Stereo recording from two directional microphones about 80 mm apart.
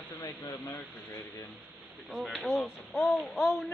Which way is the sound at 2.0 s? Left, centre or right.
Centre.